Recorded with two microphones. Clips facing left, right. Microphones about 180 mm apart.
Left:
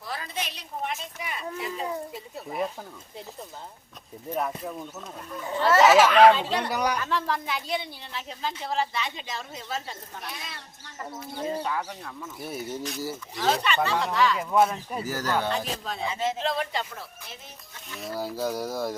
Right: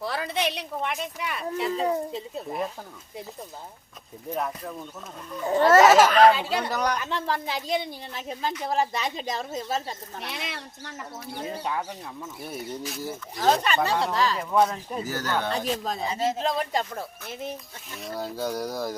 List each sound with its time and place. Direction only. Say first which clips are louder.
0.0 s speech: right 7 dB; 70° right (ahead or behind)
1.7 s a child's voice: right 6 dB; 25° right (ahead or behind)
4.4 s speech: left 1 dB; 5° left (ahead or behind)
5.5 s speech: right 2 dB; 45° right (ahead or behind)
6.3 s speech: even; 10° right (ahead or behind)
6.7 s speech: even; 10° left (ahead or behind)
7.0 s a woman's voice: even; 25° right (ahead or behind); by 9.9 s 40° right (ahead or behind)
10.2 s speech: right 4 dB; 80° right
12.4 s speech: left 2 dB; centre (ahead or behind)
13.3 s speech: right 3 dB; 40° right (ahead or behind)
14.5 s speech: even; 5° left (ahead or behind)
15.4 s speech: right 2 dB; 40° right (ahead or behind)
17.9 s speech: left 1 dB; centre (ahead or behind)